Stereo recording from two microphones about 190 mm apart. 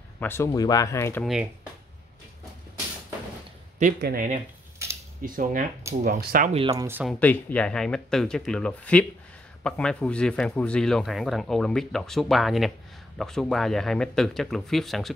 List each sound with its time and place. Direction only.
0.2 s speech: 15° left (ahead or behind)
1.2 s speech: 5° right (ahead or behind)
3.8 s speech: 45° right (ahead or behind)
6.7 s speech: 20° right (ahead or behind)
7.2 s speech: 10° left (ahead or behind)